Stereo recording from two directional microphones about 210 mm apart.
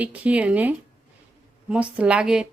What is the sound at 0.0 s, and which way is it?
A woman's voice, 5° right (ahead or behind).